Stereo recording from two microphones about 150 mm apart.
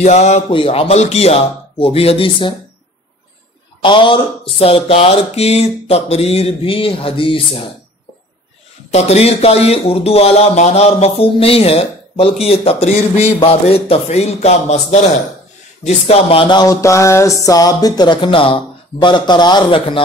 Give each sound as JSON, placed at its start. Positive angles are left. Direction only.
{"t": 0.0, "sound": "speech", "side_deg": 50}
{"t": 3.8, "sound": "speech", "side_deg": 35}
{"t": 8.9, "sound": "speech", "side_deg": 45}